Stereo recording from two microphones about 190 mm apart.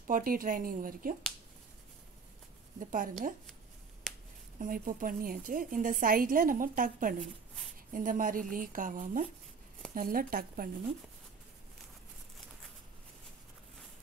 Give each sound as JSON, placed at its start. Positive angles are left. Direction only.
{"t": 0.0, "sound": "a woman's voice", "side_deg": -45}
{"t": 2.8, "sound": "a woman's voice", "side_deg": -45}
{"t": 4.6, "sound": "a woman's voice", "side_deg": -45}